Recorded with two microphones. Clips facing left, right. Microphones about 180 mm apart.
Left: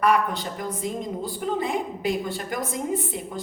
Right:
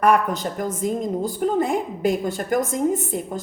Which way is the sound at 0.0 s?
45° right (ahead or behind).